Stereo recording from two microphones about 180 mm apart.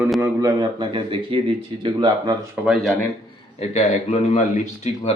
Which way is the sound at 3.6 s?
35° left (ahead or behind).